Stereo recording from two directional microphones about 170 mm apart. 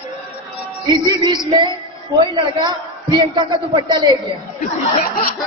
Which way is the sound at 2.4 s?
25° right (ahead or behind).